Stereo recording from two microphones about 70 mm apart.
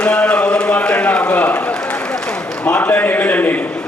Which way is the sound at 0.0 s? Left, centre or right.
Centre.